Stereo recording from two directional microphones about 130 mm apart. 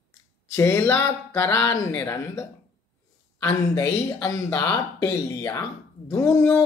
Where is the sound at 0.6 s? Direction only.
20° left (ahead or behind).